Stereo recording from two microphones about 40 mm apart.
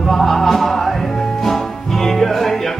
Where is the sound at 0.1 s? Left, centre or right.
Centre.